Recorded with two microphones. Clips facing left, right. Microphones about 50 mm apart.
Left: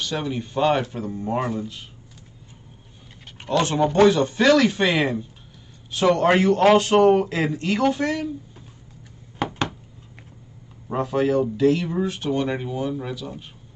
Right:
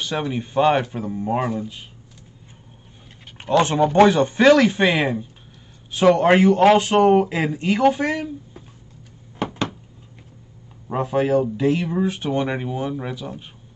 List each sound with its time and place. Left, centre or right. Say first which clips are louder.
0.0 s speech: right 2 dB; right
3.3 s speech: right 3 dB; right
10.9 s speech: right 2 dB; centre